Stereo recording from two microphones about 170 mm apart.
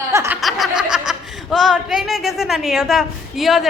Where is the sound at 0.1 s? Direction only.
15° right (ahead or behind).